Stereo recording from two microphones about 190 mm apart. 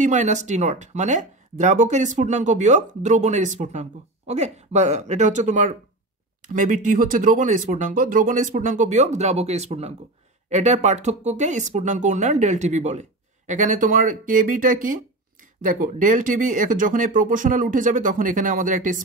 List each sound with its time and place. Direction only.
0.0 s speech: 40° right (ahead or behind)